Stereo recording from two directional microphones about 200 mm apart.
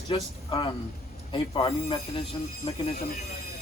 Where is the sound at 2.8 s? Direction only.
45° left (ahead or behind).